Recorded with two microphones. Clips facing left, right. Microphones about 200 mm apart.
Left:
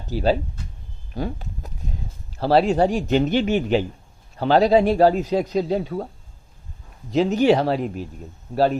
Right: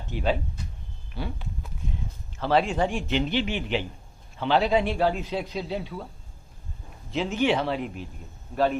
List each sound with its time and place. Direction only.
0.1 s a man's voice: 35° left (ahead or behind)
1.1 s a sound: 40° left (ahead or behind)
2.4 s a man's voice: 35° left (ahead or behind)
7.1 s a man's voice: 40° left (ahead or behind)